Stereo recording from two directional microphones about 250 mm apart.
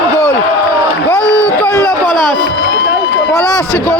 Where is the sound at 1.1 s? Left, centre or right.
Centre.